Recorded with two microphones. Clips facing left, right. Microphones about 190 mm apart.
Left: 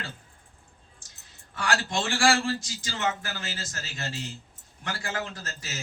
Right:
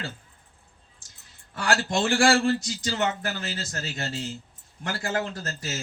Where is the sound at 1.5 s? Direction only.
35° right (ahead or behind).